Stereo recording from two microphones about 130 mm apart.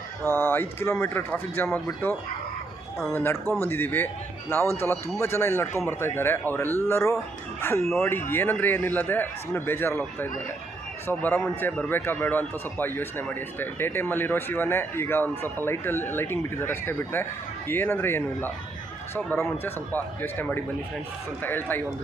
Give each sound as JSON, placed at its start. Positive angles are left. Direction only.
{"t": 0.3, "sound": "speech", "side_deg": 15}
{"t": 3.2, "sound": "speech", "side_deg": 15}